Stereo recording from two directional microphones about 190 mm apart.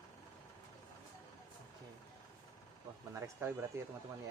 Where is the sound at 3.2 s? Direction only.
15° right (ahead or behind).